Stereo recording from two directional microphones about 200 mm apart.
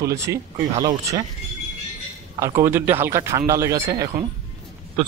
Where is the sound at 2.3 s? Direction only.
15° right (ahead or behind).